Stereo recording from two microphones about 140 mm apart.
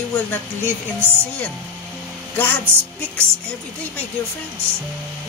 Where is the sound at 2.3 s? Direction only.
15° left (ahead or behind).